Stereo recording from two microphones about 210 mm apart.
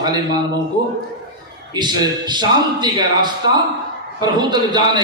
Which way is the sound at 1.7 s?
20° right (ahead or behind).